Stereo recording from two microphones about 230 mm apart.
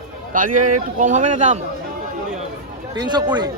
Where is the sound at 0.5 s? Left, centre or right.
Right.